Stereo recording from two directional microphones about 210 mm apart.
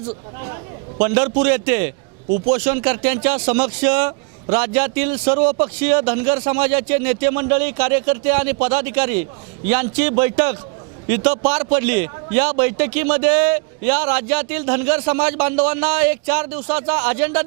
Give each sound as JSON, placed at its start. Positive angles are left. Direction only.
{"t": 0.4, "sound": "a man's voice", "side_deg": -20}
{"t": 5.3, "sound": "a man's voice", "side_deg": -25}